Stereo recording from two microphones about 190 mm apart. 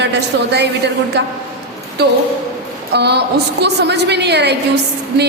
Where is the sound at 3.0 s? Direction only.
60° right (ahead or behind).